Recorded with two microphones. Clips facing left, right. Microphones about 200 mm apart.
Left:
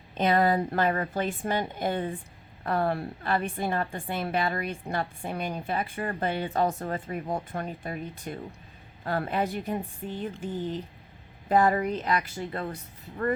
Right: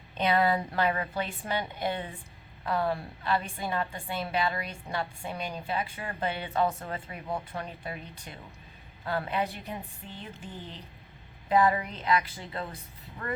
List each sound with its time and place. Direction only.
0.2 s a woman's voice: 45° left (ahead or behind)
11.4 s a woman's voice: 45° left (ahead or behind)